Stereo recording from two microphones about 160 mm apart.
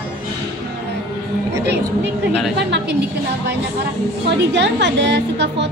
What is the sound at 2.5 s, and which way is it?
Speech, 90° right.